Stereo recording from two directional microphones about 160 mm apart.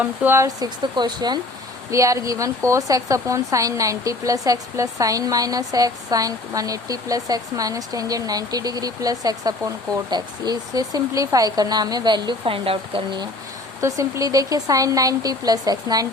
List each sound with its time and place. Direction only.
0.0 s a woman's voice: 15° right (ahead or behind); by 13.2 s 35° right (ahead or behind)
13.8 s a woman's voice: 20° right (ahead or behind)